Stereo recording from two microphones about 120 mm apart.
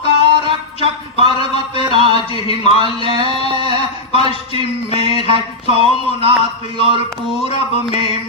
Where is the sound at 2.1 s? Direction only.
55° left (ahead or behind).